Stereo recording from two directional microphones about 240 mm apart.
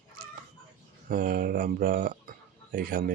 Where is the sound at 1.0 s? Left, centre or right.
Right.